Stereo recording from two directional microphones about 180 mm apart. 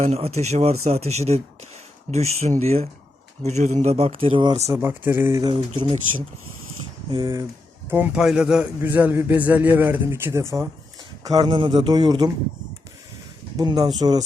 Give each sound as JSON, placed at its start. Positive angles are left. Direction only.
{"t": 0.0, "sound": "speech", "side_deg": -35}
{"t": 4.7, "sound": "a man's voice", "side_deg": -10}
{"t": 5.4, "sound": "a man's voice", "side_deg": -25}
{"t": 7.1, "sound": "a man's voice", "side_deg": -20}
{"t": 7.9, "sound": "a man's voice", "side_deg": -10}
{"t": 11.3, "sound": "a man's voice", "side_deg": -30}
{"t": 13.6, "sound": "a man's voice", "side_deg": -25}